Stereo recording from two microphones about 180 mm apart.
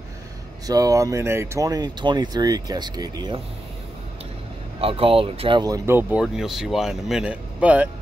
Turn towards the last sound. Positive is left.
turn(degrees=-5)  # may be behind; listen again after turning